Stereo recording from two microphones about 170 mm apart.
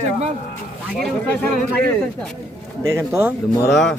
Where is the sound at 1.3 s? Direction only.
10° left (ahead or behind).